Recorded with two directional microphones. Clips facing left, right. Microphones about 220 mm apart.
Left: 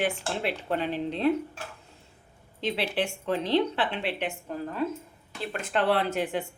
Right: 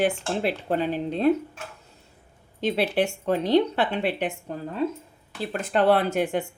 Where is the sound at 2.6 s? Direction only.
45° right (ahead or behind).